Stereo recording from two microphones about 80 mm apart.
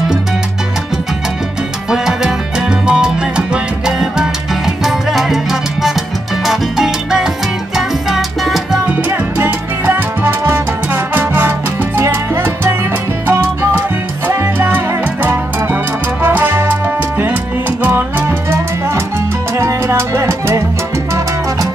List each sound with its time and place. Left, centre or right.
1.9 s salsa music: centre
9.4 s salsa music: right
15.2 s music: right
17.8 s music: right
19.6 s salsa music: right